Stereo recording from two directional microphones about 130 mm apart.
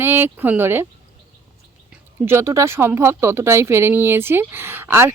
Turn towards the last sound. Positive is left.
turn(degrees=-20)  # may be behind; listen again after turning